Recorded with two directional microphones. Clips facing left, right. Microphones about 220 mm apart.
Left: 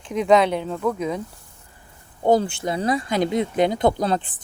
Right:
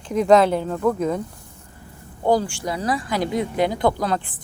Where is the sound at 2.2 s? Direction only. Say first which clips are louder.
Left 1 dB; 20° left (ahead or behind).